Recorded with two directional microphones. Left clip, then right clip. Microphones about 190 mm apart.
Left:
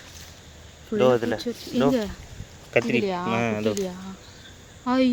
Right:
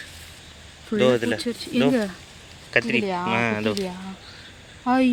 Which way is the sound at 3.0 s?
40° right (ahead or behind).